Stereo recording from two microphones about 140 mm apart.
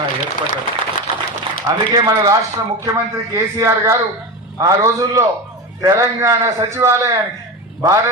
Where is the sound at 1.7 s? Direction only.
25° right (ahead or behind).